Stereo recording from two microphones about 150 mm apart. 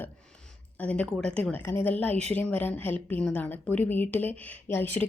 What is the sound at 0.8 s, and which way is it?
A woman's voice, 10° left (ahead or behind).